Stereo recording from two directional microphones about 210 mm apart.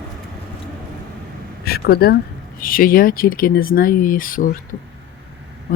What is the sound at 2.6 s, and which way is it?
Speech, 40° left (ahead or behind).